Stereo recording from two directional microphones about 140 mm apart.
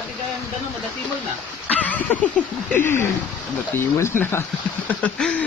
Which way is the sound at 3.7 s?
20° left (ahead or behind).